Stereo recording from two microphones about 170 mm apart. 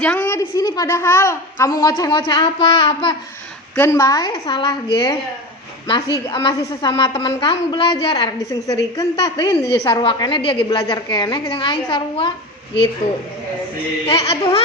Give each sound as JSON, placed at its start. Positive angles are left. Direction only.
{"t": 0.0, "sound": "a child's voice", "side_deg": 10}
{"t": 3.8, "sound": "a child's voice", "side_deg": 15}
{"t": 13.0, "sound": "speech", "side_deg": 55}
{"t": 14.1, "sound": "a woman's voice", "side_deg": 35}